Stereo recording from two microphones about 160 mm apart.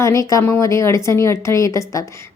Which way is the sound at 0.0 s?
20° left (ahead or behind).